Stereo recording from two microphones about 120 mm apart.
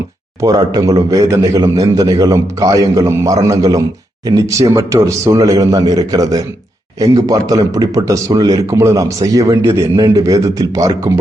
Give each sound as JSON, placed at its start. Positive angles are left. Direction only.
{"t": 0.4, "sound": "a man's voice", "side_deg": -30}